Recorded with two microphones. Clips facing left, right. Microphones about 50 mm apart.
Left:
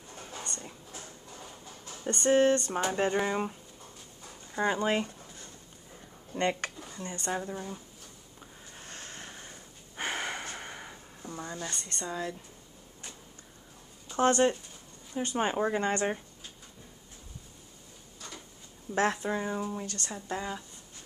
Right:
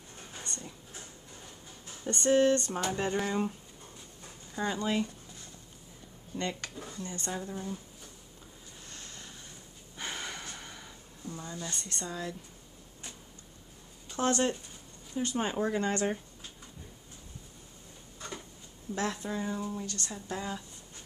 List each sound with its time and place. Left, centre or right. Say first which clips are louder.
2.0 s speech: left 1 dB; centre
4.6 s speech: left 3 dB; left
6.3 s speech: left 6 dB; left
7.2 s speech: left 4 dB; left
8.4 s snort: left 5 dB; left
11.7 s speech: left 2 dB; centre
14.1 s speech: left 4 dB; left
18.9 s speech: left 5 dB; left
20.2 s speech: left 2 dB; centre